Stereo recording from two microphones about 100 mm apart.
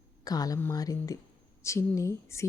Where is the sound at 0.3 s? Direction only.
40° left (ahead or behind).